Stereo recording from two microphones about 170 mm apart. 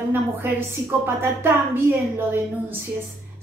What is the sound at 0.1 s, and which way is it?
A woman's voice, 15° right (ahead or behind).